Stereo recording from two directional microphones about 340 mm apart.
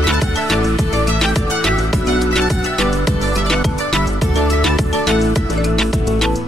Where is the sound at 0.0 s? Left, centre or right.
Centre.